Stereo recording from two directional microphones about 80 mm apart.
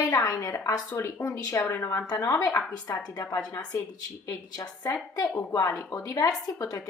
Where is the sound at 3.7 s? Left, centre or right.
Left.